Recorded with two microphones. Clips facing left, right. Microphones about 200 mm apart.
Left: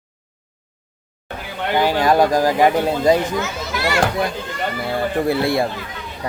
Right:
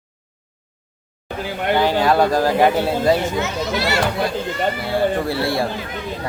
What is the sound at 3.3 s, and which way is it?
Speech, 25° right (ahead or behind).